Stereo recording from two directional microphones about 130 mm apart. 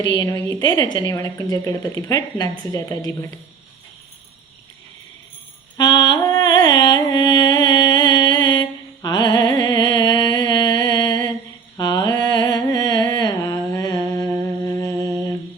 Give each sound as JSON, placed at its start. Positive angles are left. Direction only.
{"t": 0.4, "sound": "a woman's voice", "side_deg": 30}
{"t": 5.7, "sound": "music", "side_deg": 35}
{"t": 11.8, "sound": "mantra", "side_deg": 30}